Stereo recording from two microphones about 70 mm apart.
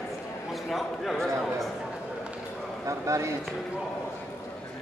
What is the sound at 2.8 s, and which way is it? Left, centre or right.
Speech, right.